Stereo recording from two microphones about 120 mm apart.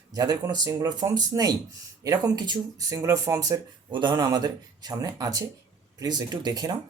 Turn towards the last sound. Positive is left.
turn(degrees=-35)  # may be behind; listen again after turning